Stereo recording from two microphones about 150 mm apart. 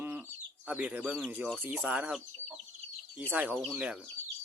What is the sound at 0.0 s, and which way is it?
Bird, 10° right (ahead or behind).